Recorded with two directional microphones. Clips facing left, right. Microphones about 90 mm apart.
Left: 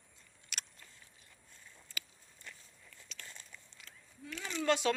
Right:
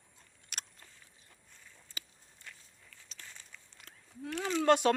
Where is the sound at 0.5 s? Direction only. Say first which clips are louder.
Right 1 dB; 40° right (ahead or behind).